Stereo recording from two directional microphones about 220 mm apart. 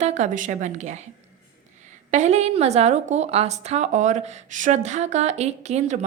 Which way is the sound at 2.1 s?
30° right (ahead or behind).